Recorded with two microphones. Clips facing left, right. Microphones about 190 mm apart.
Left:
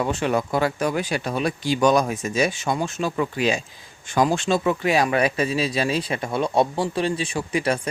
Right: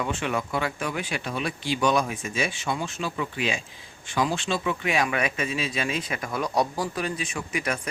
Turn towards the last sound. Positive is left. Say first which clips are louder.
# left 6 dB
turn(degrees=30)  # may be behind; listen again after turning